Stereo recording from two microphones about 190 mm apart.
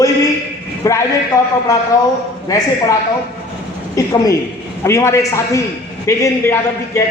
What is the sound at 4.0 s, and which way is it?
Speech, 15° left (ahead or behind).